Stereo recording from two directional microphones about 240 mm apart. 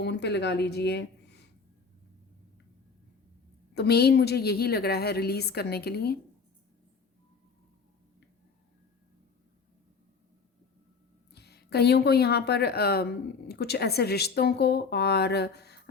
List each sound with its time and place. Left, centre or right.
0.0 s a woman's voice: left
3.8 s a woman's voice: left
11.3 s speech: left